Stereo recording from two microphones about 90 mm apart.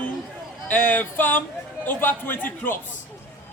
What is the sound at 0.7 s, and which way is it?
Speech, 20° left (ahead or behind).